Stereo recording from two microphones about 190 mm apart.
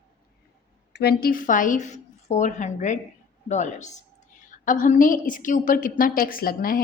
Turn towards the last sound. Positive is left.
turn(degrees=50)  # may be behind; listen again after turning